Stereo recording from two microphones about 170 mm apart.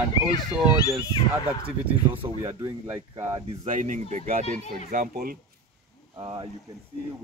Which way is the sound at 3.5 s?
45° right (ahead or behind).